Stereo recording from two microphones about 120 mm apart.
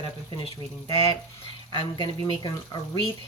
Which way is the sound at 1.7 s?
40° left (ahead or behind).